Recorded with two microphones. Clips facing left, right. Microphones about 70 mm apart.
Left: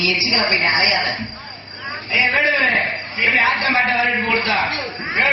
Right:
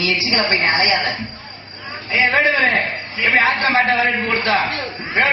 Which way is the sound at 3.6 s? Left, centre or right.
Right.